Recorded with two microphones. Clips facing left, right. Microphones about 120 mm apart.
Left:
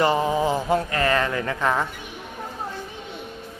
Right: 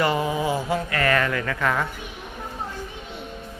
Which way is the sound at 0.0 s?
30° left (ahead or behind).